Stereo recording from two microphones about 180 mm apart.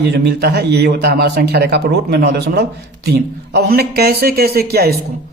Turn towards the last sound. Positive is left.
turn(degrees=-60)  # may be behind; listen again after turning